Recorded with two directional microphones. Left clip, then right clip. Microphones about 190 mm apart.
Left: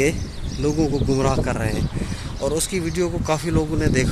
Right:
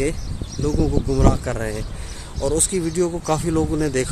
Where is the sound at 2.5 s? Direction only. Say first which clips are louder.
Right 2 dB; 15° right (ahead or behind).